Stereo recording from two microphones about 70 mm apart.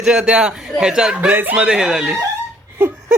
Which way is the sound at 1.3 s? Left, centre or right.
Right.